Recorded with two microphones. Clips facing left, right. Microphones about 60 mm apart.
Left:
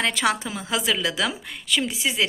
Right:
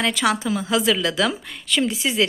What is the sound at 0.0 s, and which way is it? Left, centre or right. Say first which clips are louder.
Speech: right 2 dB; left.